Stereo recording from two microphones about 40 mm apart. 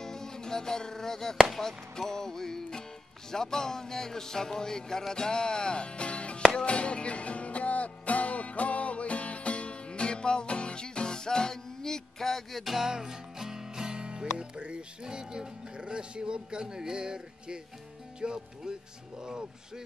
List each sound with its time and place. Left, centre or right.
0.0 s music: centre
12.7 s music: centre
19.2 s speech: centre